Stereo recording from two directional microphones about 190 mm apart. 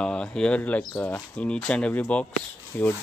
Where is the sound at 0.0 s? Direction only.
5° left (ahead or behind).